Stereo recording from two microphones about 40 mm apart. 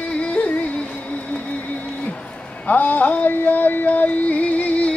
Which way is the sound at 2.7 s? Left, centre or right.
Left.